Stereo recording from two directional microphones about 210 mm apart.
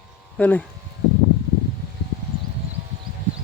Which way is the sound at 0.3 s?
5° left (ahead or behind).